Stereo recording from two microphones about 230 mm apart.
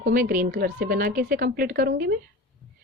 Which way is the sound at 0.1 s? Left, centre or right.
Right.